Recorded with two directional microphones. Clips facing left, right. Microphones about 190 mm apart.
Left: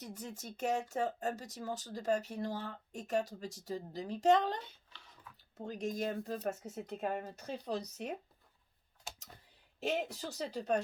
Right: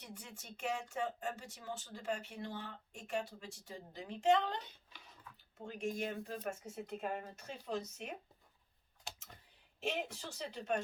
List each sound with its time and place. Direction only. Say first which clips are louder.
0.0 s speech: left 7 dB; 40° left (ahead or behind)
10.2 s speech: left 5 dB; 35° left (ahead or behind)